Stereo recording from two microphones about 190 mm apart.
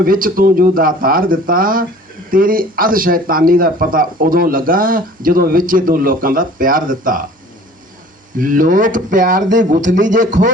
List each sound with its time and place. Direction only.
0.0 s speech: 50° right (ahead or behind)
8.4 s speech: 45° right (ahead or behind)